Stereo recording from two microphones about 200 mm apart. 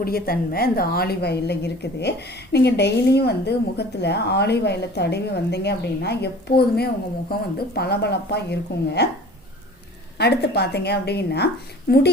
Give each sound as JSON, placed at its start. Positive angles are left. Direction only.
{"t": 0.0, "sound": "a woman's voice", "side_deg": 50}
{"t": 10.2, "sound": "a woman's voice", "side_deg": 55}